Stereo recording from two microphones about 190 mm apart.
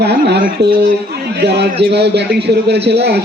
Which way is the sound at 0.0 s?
60° right (ahead or behind).